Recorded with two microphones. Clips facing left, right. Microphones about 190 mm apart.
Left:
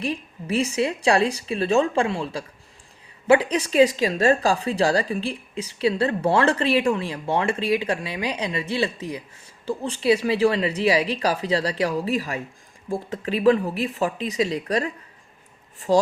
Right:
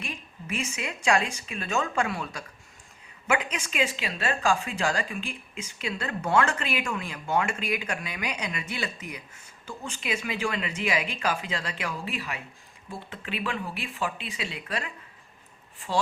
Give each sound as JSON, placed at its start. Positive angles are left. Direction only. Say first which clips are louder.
{"t": 0.0, "sound": "speech", "louder": "left 11 dB", "side_deg": 35}